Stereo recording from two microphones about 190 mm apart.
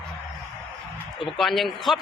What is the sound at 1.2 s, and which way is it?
Speech, centre (ahead or behind).